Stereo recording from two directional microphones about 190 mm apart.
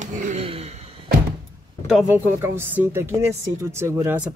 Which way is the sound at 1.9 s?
5° right (ahead or behind).